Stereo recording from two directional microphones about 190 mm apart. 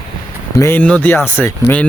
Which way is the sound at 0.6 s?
10° left (ahead or behind).